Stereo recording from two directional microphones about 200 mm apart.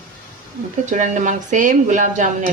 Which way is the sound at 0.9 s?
40° right (ahead or behind).